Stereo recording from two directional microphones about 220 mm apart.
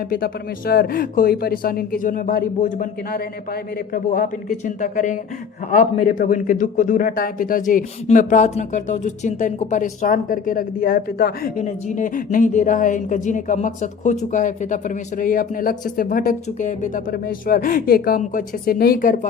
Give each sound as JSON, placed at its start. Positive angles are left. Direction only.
{"t": 0.1, "sound": "a man's voice", "side_deg": 40}